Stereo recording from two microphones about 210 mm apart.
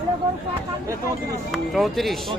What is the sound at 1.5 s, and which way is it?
Speech, centre (ahead or behind).